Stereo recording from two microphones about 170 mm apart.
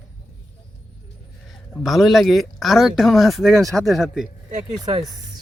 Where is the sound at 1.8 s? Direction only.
Centre (ahead or behind).